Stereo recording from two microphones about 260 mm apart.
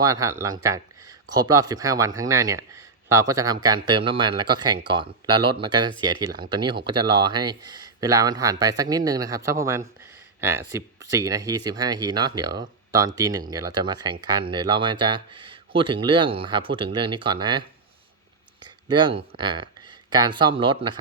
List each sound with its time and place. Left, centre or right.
0.0 s speech: centre
18.6 s speech: centre